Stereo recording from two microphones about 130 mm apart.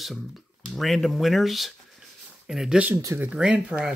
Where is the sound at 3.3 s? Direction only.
10° right (ahead or behind).